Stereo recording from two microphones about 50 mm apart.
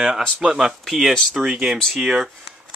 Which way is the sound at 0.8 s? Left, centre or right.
Centre.